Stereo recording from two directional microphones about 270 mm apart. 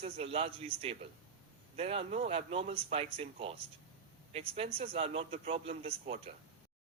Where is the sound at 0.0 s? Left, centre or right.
Right.